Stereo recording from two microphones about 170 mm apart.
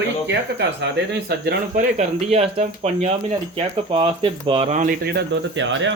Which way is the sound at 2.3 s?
35° right (ahead or behind).